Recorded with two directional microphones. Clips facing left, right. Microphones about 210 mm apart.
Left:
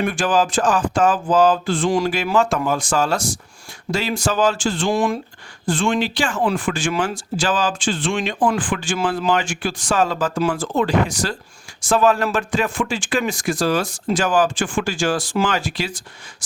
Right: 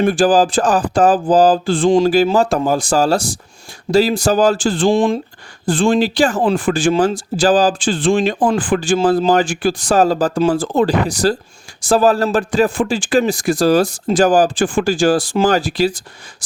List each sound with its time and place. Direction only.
0.0 s speech: 35° right (ahead or behind)
4.9 s speech: 25° right (ahead or behind)